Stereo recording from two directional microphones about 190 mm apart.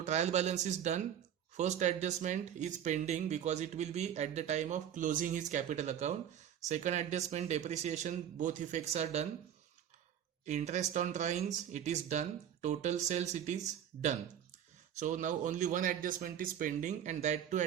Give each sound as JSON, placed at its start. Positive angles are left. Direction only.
{"t": 0.0, "sound": "speech", "side_deg": -35}
{"t": 10.4, "sound": "speech", "side_deg": -40}
{"t": 14.9, "sound": "speech", "side_deg": -40}